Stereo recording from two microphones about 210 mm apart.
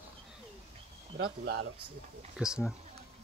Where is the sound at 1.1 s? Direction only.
50° right (ahead or behind).